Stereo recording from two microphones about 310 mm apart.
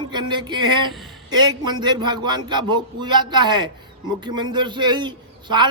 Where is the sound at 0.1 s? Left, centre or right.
Centre.